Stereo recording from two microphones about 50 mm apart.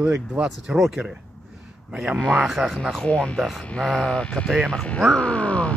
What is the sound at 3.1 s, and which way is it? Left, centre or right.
Speech, left.